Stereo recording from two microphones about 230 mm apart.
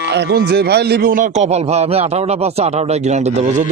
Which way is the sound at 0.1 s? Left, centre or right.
Right.